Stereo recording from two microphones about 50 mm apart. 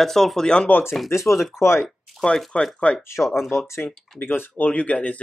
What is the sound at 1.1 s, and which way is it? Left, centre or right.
Speech, left.